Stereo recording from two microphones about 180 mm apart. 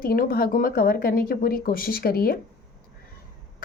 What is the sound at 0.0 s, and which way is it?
Speech, 55° left (ahead or behind).